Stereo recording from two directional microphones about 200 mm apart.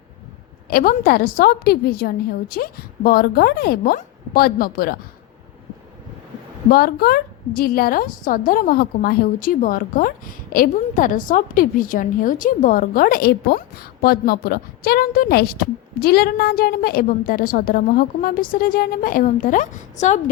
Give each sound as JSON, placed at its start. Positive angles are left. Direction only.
{"t": 0.7, "sound": "a woman's voice", "side_deg": 45}
{"t": 6.7, "sound": "a woman's voice", "side_deg": 50}